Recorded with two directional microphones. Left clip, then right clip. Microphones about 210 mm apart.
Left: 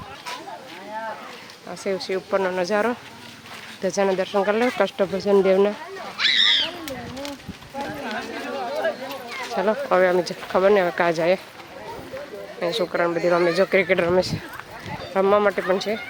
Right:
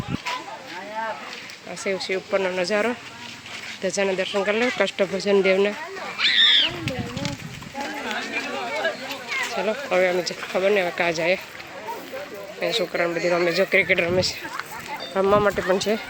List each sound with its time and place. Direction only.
1.8 s speech: 15° left (ahead or behind)
6.1 s a sound: 30° left (ahead or behind)
6.8 s a sound: 50° left (ahead or behind)
9.6 s speech: 15° left (ahead or behind)
12.5 s speech: 15° left (ahead or behind)
15.6 s speech: 5° right (ahead or behind)